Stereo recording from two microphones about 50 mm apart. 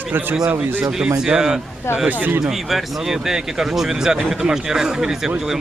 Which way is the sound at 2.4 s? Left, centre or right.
Centre.